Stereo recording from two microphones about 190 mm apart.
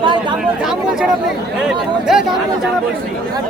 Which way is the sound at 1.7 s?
Centre (ahead or behind).